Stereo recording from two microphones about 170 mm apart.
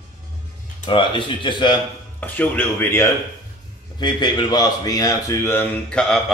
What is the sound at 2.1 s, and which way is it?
Speech, 10° left (ahead or behind).